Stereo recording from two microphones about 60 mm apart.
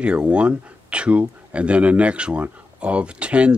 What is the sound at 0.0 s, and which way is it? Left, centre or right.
Speech, centre.